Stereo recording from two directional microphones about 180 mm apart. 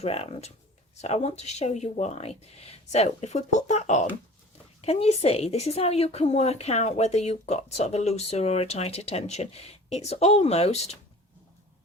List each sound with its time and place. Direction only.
0.0 s speech: 35° left (ahead or behind)